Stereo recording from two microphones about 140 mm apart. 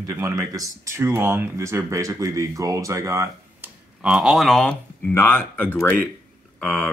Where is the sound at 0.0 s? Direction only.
20° right (ahead or behind).